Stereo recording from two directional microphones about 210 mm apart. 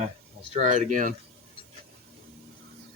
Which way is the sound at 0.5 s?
35° right (ahead or behind).